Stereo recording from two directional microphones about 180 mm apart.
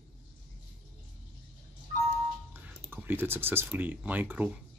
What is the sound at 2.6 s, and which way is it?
Speech, 10° right (ahead or behind).